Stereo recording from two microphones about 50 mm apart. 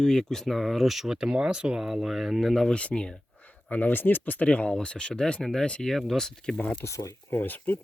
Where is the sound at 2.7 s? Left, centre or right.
Left.